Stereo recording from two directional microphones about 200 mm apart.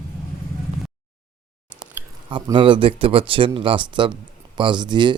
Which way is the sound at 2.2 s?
25° right (ahead or behind).